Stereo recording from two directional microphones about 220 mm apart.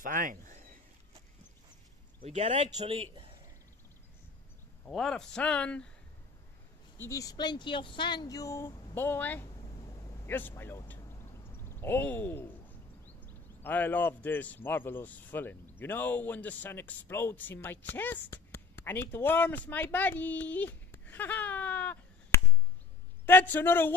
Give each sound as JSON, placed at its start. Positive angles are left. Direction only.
{"t": 0.0, "sound": "a sound", "side_deg": -40}
{"t": 2.2, "sound": "speech", "side_deg": -30}
{"t": 4.8, "sound": "speech", "side_deg": 0}
{"t": 7.0, "sound": "speech", "side_deg": 15}
{"t": 9.6, "sound": "a sound", "side_deg": 20}
{"t": 13.6, "sound": "speech", "side_deg": 10}